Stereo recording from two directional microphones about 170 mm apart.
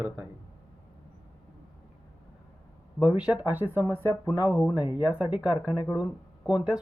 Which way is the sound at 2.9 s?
5° right (ahead or behind).